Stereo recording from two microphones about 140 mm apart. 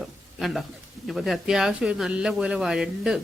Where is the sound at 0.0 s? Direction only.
Centre (ahead or behind).